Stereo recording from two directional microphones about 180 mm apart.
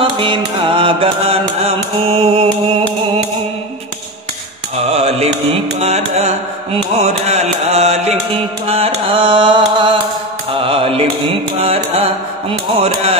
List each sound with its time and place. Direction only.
0.0 s mantra: 25° right (ahead or behind)
4.8 s music: 35° right (ahead or behind)
8.6 s mantra: 35° right (ahead or behind)
10.5 s music: 30° right (ahead or behind)
11.6 s mantra: 35° right (ahead or behind)